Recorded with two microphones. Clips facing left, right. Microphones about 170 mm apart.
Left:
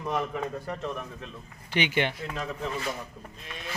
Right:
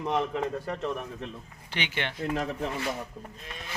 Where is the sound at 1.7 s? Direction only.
15° left (ahead or behind).